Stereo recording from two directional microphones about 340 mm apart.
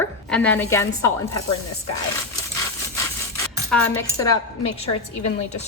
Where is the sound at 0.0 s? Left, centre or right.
Centre.